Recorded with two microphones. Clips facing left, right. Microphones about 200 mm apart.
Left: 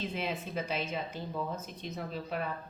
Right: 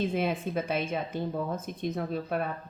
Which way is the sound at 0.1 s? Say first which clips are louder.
Right 7 dB; 50° right (ahead or behind).